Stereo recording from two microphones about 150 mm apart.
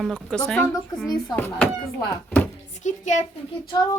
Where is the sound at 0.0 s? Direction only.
5° left (ahead or behind).